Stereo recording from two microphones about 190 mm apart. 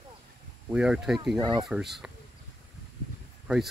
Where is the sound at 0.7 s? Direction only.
5° right (ahead or behind).